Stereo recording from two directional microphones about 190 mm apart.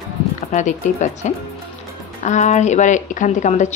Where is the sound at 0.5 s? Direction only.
40° left (ahead or behind).